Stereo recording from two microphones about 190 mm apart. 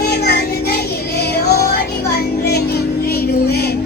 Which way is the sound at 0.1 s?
55° left (ahead or behind).